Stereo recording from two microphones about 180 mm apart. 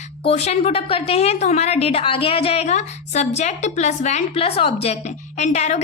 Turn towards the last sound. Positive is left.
turn(degrees=40)  # may be behind; listen again after turning